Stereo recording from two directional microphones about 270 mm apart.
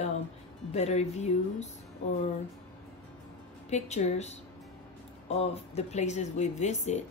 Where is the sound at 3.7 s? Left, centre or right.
Left.